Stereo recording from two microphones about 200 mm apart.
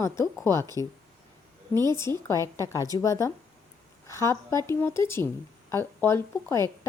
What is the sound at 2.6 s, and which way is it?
A woman's voice, 15° left (ahead or behind).